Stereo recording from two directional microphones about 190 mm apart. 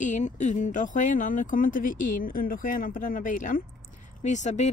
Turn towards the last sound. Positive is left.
turn(degrees=40)  # may be behind; listen again after turning